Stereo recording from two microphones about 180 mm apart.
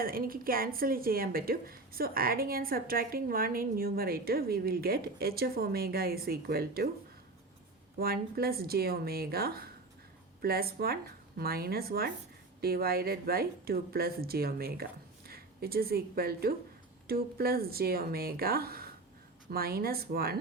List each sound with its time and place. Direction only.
0.0 s speech: 55° right (ahead or behind)
7.9 s speech: 55° right (ahead or behind)